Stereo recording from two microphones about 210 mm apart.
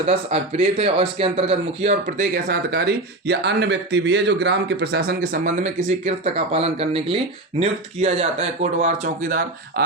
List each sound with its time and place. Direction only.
0.1 s speech: 30° right (ahead or behind)
9.8 s speech: 50° right (ahead or behind)